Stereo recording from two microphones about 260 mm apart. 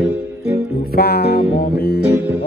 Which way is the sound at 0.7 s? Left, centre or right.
Left.